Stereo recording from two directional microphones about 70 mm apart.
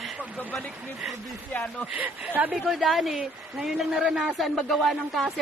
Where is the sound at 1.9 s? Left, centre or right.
Right.